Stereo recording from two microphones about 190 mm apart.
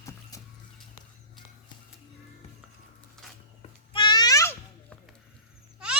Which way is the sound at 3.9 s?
25° left (ahead or behind).